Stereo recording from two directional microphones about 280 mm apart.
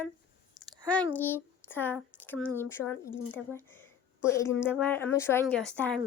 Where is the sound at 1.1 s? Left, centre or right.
Centre.